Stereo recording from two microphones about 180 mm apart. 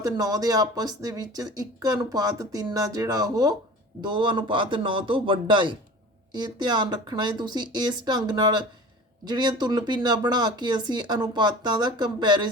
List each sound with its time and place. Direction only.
0.0 s speech: 20° right (ahead or behind)